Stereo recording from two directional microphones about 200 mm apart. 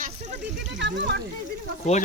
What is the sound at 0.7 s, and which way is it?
Speech, 60° right (ahead or behind).